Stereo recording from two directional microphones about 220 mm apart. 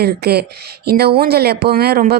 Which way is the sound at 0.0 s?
45° right (ahead or behind).